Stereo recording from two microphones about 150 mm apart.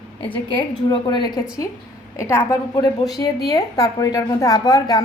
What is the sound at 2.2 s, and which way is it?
A woman's voice, 20° left (ahead or behind).